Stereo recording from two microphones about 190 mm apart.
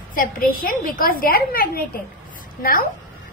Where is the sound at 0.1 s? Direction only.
50° left (ahead or behind).